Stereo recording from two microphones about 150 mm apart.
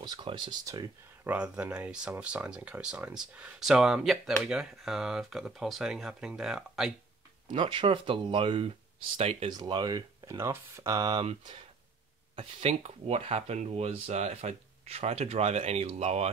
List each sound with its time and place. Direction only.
0.0 s speech: 30° right (ahead or behind)
0.7 s speech: 20° right (ahead or behind)
1.3 s speech: 5° right (ahead or behind)
7.5 s speech: 35° right (ahead or behind)
9.5 s speech: 30° right (ahead or behind); by 16.3 s 45° right (ahead or behind)